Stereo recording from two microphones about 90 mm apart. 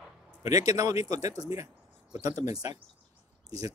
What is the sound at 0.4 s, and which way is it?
Speech, 40° right (ahead or behind).